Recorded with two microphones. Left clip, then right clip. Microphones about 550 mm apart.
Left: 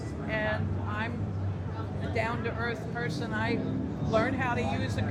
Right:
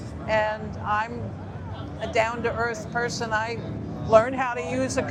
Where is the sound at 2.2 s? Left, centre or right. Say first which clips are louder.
Right 8 dB; right.